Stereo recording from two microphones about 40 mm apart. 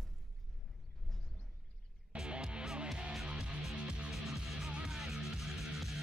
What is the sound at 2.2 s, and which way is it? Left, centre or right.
Music, right.